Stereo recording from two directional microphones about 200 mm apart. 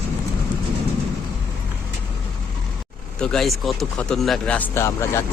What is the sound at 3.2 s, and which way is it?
Speech, 5° left (ahead or behind).